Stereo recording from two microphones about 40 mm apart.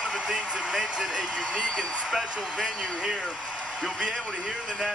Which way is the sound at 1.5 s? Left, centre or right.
Left.